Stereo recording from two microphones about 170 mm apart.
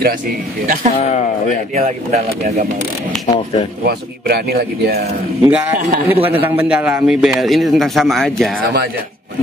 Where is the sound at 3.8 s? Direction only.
65° right (ahead or behind).